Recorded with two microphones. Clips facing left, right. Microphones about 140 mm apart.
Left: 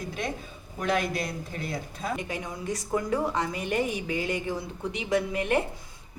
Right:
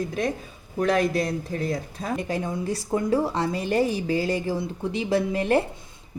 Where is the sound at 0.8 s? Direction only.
35° right (ahead or behind).